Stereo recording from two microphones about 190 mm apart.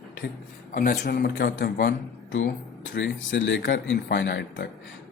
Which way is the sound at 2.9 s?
75° left (ahead or behind).